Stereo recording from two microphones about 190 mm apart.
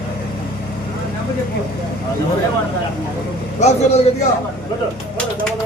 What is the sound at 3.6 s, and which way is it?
Speech, 35° left (ahead or behind).